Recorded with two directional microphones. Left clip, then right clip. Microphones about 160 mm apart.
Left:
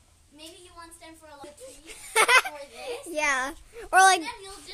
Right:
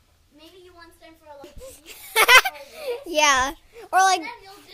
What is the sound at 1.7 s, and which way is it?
Speech, centre (ahead or behind).